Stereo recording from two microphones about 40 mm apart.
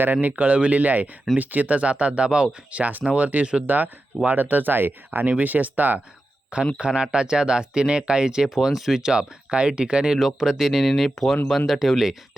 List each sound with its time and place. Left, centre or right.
0.0 s speech: right
5.4 s speech: right
6.7 s speech: right; by 9.0 s centre
9.0 s speech: right
10.2 s speech: centre